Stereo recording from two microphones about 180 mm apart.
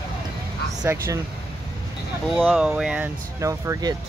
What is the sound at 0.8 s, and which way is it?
Speech, 15° right (ahead or behind).